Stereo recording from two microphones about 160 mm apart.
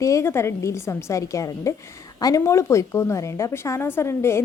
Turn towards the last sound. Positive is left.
turn(degrees=15)  # may be behind; listen again after turning